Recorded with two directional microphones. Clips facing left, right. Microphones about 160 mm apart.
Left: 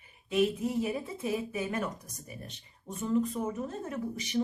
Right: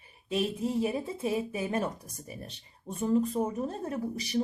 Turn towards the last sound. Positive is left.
turn(degrees=-35)  # may be behind; listen again after turning